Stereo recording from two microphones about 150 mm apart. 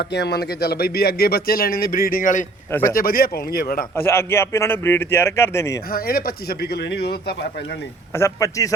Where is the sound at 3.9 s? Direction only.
15° left (ahead or behind).